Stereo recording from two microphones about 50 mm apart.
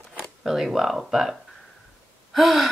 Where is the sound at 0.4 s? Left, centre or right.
Centre.